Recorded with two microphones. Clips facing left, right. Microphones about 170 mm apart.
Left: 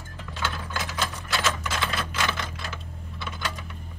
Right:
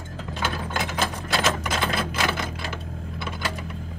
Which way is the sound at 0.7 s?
55° right (ahead or behind).